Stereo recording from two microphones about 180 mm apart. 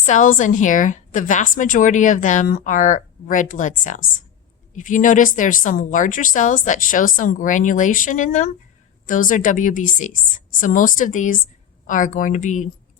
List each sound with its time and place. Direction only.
0.0 s a woman's voice: 45° left (ahead or behind)